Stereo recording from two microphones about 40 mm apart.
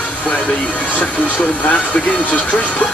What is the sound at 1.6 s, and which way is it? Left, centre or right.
Speech, left.